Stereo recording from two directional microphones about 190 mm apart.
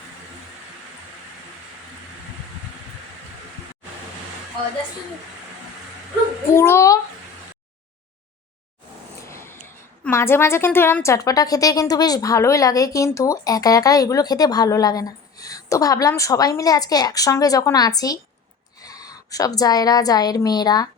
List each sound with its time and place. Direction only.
6.6 s a child's voice: 15° left (ahead or behind)
9.2 s a sound: 15° left (ahead or behind)
10.0 s a woman's voice: 15° left (ahead or behind)